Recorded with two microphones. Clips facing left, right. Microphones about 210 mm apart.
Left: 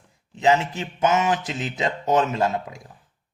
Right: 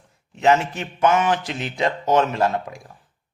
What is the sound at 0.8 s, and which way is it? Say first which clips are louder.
Speech: right 2 dB; 20° left (ahead or behind).